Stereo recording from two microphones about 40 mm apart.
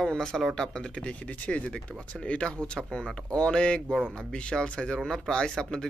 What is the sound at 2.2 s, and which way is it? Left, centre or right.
Speech, left.